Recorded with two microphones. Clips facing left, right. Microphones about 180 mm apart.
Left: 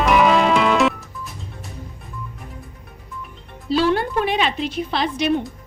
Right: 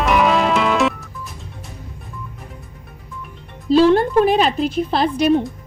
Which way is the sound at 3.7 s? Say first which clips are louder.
Right 6 dB; 35° right (ahead or behind).